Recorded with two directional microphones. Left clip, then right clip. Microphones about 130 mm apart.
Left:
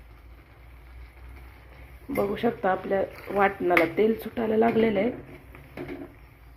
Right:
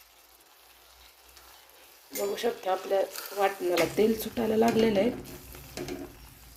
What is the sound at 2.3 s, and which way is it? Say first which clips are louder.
Speech: left 2 dB; 20° right (ahead or behind).